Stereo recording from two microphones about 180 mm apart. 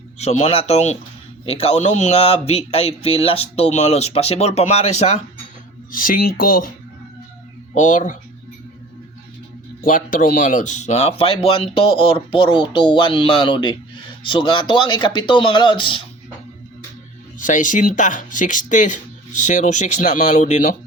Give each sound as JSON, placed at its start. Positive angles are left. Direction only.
{"t": 0.2, "sound": "speech", "side_deg": 35}
{"t": 5.9, "sound": "speech", "side_deg": 50}
{"t": 7.7, "sound": "speech", "side_deg": 40}
{"t": 9.8, "sound": "speech", "side_deg": 45}
{"t": 17.3, "sound": "speech", "side_deg": 45}